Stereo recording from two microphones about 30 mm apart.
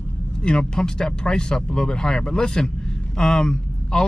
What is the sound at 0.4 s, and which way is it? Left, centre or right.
Speech, left.